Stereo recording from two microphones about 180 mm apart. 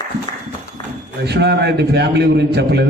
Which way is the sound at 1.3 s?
65° right (ahead or behind).